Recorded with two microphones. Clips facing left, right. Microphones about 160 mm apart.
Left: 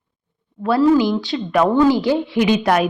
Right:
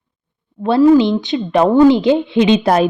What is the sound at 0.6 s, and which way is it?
Speech, 25° right (ahead or behind).